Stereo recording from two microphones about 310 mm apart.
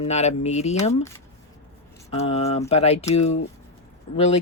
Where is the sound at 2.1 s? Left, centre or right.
Centre.